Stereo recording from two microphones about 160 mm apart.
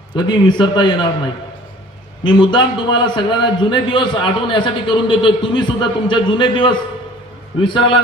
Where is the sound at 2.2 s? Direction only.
30° left (ahead or behind).